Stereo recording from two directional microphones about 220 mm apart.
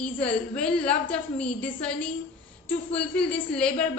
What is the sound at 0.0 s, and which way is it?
A woman's voice, 5° left (ahead or behind).